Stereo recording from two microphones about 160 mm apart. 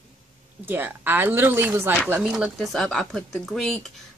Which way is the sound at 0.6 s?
15° right (ahead or behind).